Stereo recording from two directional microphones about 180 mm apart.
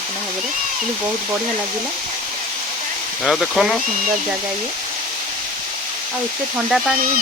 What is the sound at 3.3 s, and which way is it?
Speech, centre (ahead or behind).